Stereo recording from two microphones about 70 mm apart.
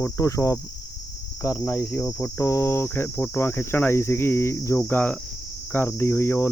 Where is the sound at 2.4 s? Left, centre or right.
Left.